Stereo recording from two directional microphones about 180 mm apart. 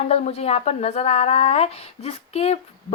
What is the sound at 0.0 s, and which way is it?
A woman's voice, 35° left (ahead or behind).